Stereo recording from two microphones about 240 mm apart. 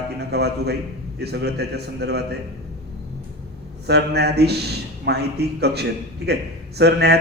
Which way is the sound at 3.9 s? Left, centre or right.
Right.